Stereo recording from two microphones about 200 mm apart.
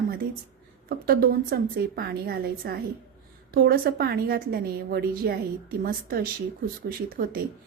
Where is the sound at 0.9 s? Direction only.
50° right (ahead or behind).